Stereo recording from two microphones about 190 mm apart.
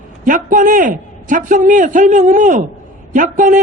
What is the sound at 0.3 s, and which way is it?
A man's voice, 45° right (ahead or behind).